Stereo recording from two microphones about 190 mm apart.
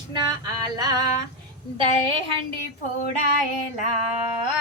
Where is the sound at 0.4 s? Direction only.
20° right (ahead or behind).